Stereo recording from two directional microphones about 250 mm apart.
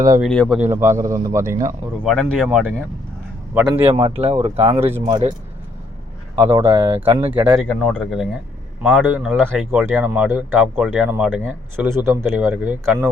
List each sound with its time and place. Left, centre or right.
0.2 s speech: centre
2.0 s speech: centre
3.8 s speech: right
4.9 s speech: centre
6.3 s speech: centre